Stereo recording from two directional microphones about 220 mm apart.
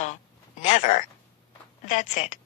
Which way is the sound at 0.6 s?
35° left (ahead or behind).